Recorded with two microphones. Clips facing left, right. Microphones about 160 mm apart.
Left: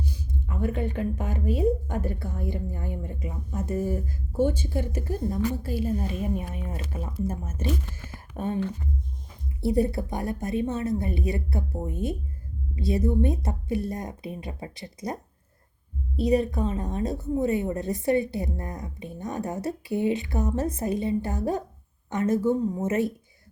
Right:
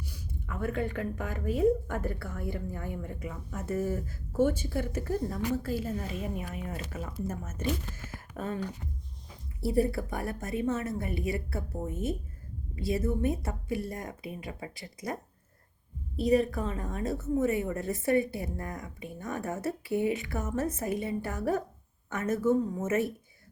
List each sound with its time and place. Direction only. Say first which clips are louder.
0.1 s a woman's voice: left 5 dB; 25° left (ahead or behind)
3.9 s a woman's voice: left 2 dB; 30° left (ahead or behind)
5.6 s a woman's voice: left 5 dB; 15° left (ahead or behind)
9.6 s a woman's voice: left 3 dB; 20° left (ahead or behind)
16.2 s a woman's voice: left 2 dB; 15° left (ahead or behind)
16.8 s a woman's voice: left 4 dB; 35° left (ahead or behind)